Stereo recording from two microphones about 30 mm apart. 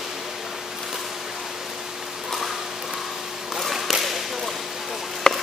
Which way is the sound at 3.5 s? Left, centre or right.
Centre.